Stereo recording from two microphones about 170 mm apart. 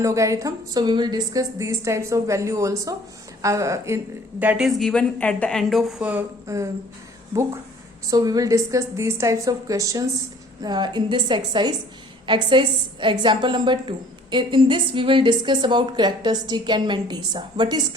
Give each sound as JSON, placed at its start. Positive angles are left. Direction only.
{"t": 0.0, "sound": "a woman's voice", "side_deg": -20}
{"t": 8.1, "sound": "a woman's voice", "side_deg": -20}